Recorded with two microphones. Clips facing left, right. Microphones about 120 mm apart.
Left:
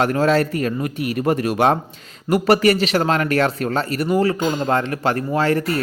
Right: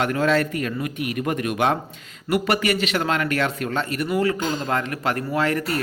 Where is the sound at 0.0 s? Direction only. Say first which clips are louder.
Left 4 dB; 35° left (ahead or behind).